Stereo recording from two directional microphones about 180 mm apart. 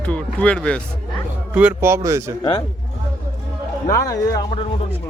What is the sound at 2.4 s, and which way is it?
Speech, 30° left (ahead or behind).